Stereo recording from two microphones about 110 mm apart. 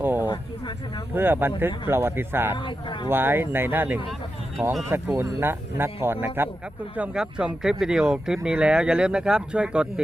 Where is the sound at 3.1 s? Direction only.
20° right (ahead or behind).